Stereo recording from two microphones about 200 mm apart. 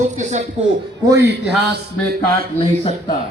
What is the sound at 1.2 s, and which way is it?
Speech, 55° right (ahead or behind).